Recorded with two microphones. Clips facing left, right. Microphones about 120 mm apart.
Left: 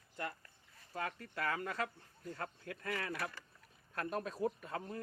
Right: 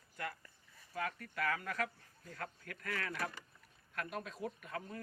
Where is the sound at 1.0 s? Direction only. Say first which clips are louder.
Right 1 dB; 30° left (ahead or behind).